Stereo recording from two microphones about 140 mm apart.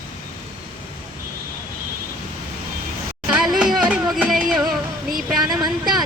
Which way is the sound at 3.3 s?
5° right (ahead or behind).